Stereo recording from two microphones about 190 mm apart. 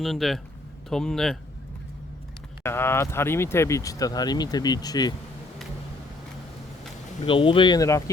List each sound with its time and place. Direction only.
0.0 s speech: centre (ahead or behind)
2.6 s speech: 10° left (ahead or behind)
7.3 s speech: 25° left (ahead or behind)